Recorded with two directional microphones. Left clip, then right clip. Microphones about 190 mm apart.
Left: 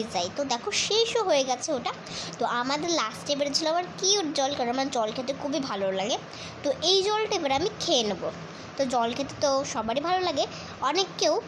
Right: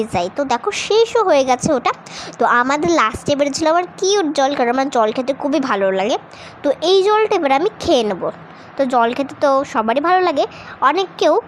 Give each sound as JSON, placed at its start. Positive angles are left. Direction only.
{"t": 0.0, "sound": "a woman's voice", "side_deg": -30}